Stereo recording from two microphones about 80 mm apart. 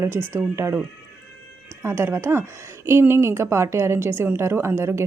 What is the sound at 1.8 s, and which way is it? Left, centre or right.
A woman's voice, right.